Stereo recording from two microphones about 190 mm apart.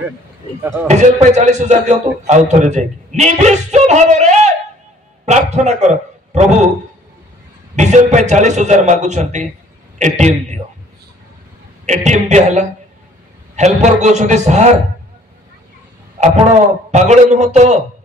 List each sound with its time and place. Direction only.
0.6 s a man's voice: 10° right (ahead or behind)
0.8 s a man's voice: 35° right (ahead or behind)
5.2 s a sound: 35° right (ahead or behind)
7.7 s a man's voice: 40° right (ahead or behind)
11.8 s a man's voice: 40° right (ahead or behind)
16.2 s a man's voice: 35° right (ahead or behind)